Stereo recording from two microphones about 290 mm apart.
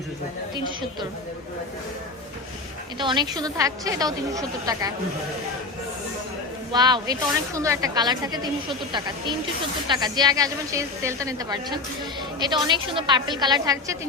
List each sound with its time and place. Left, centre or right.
3.0 s a woman's voice: centre
6.7 s a woman's voice: centre